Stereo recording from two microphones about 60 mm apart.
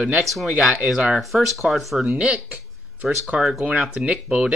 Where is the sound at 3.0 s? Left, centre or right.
Centre.